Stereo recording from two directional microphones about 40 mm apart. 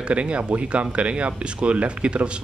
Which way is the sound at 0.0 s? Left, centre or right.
Right.